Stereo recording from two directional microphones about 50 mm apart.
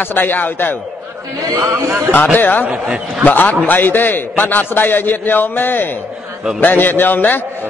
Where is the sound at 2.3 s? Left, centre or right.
Left.